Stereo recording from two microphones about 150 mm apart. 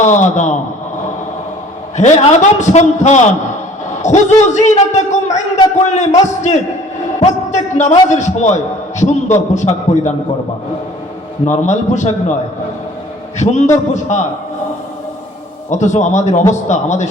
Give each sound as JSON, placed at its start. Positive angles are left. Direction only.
{"t": 0.0, "sound": "a man's voice", "side_deg": 55}
{"t": 2.0, "sound": "a man's voice", "side_deg": 50}
{"t": 11.4, "sound": "a man's voice", "side_deg": 55}
{"t": 13.4, "sound": "a man's voice", "side_deg": 50}
{"t": 15.7, "sound": "a man's voice", "side_deg": 50}